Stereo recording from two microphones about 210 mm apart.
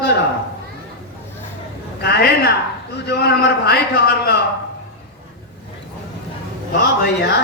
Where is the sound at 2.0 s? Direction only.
50° left (ahead or behind).